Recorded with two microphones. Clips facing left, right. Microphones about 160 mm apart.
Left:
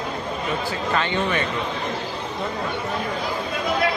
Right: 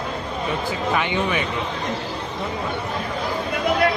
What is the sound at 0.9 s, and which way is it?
Speech, 10° right (ahead or behind).